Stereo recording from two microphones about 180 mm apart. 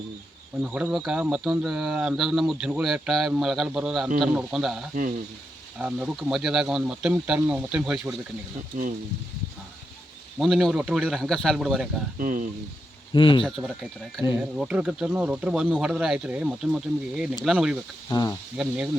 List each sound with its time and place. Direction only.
0.6 s speech: 5° right (ahead or behind)
8.7 s speech: 50° right (ahead or behind)
10.3 s speech: centre (ahead or behind)
12.2 s speech: 50° right (ahead or behind)
13.1 s speech: 25° left (ahead or behind)
14.3 s speech: 10° right (ahead or behind)
18.1 s speech: 20° left (ahead or behind)
18.5 s speech: 5° right (ahead or behind)